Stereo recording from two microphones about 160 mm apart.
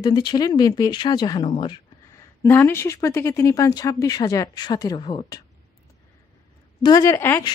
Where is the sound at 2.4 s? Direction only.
15° left (ahead or behind).